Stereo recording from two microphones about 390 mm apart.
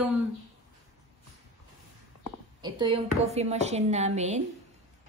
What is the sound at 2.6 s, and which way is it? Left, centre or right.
Speech, centre.